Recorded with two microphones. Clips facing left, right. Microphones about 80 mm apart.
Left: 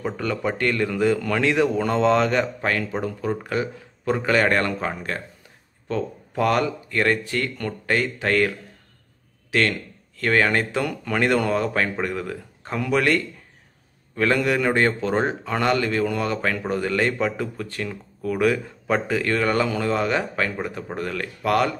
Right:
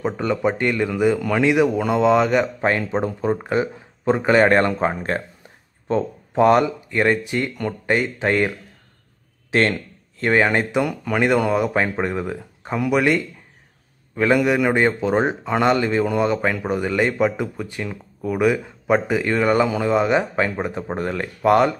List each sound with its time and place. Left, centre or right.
0.0 s a man's voice: right
2.6 s a man's voice: right